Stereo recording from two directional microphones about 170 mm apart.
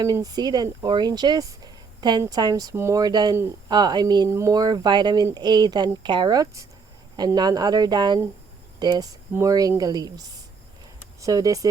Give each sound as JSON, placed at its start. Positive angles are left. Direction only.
{"t": 0.0, "sound": "speech", "side_deg": -20}